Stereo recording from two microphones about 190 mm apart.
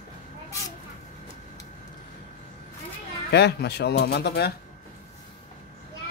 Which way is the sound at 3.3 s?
60° left (ahead or behind).